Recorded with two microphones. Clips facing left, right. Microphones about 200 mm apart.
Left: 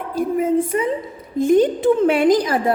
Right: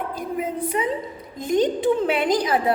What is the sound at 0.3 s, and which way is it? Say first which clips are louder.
A woman's voice: left 6 dB; 45° left (ahead or behind).